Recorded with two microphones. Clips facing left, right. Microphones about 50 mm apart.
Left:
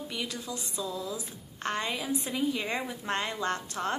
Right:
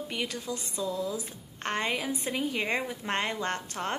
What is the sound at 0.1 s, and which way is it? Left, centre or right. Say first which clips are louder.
A woman's voice: right 3 dB; right.